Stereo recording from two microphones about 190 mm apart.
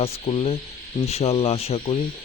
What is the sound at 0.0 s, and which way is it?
Speech, 30° left (ahead or behind).